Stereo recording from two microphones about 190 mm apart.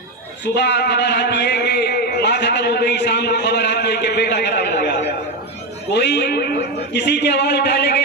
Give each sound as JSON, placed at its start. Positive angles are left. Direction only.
{"t": 0.4, "sound": "a man's voice", "side_deg": 65}